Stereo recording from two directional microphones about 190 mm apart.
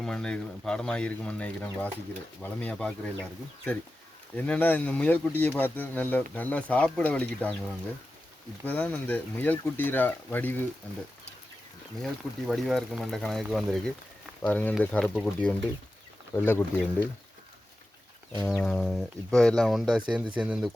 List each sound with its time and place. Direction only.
0.0 s speech: 5° left (ahead or behind)
4.4 s speech: 5° left (ahead or behind)
12.0 s speech: centre (ahead or behind)
18.4 s speech: 5° left (ahead or behind)